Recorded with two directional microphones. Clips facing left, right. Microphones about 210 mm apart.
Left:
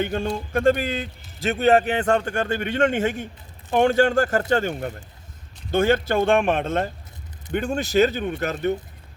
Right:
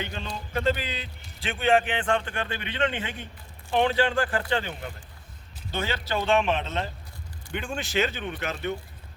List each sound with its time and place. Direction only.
0.0 s a man's voice: 50° left (ahead or behind)
7.5 s speech: 40° left (ahead or behind)